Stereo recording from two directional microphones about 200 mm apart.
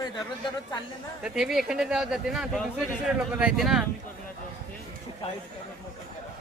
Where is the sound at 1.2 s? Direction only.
Centre (ahead or behind).